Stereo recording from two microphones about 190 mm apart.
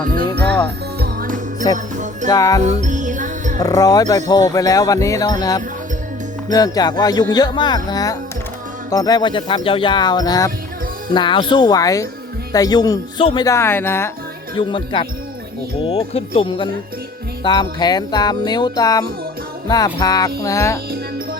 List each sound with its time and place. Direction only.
0.9 s music: 50° right (ahead or behind)
1.6 s speech: 20° left (ahead or behind)
2.6 s music: 40° right (ahead or behind)
3.6 s speech: 20° left (ahead or behind)
14.5 s speech: 25° left (ahead or behind)